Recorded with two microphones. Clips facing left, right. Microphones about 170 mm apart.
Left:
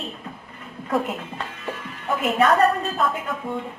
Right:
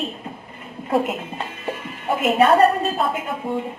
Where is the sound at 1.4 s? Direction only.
20° right (ahead or behind).